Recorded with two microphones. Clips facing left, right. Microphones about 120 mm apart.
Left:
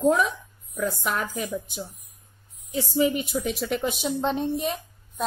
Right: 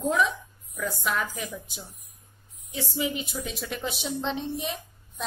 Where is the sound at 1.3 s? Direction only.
50° left (ahead or behind).